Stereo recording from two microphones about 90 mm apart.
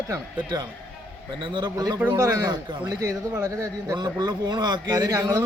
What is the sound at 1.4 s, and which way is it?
Speech, 60° right (ahead or behind).